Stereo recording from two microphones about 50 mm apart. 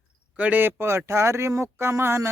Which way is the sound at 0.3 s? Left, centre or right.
Right.